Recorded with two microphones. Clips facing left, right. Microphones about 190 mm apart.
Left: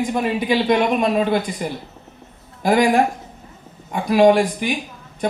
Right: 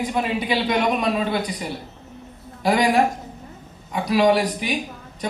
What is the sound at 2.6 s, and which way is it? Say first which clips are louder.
Speech: left 2 dB; 45° left (ahead or behind).